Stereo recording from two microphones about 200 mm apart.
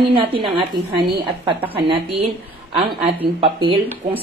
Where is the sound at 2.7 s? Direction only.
25° right (ahead or behind).